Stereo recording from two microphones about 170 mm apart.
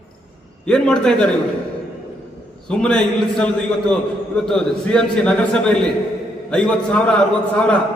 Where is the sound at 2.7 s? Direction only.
5° left (ahead or behind).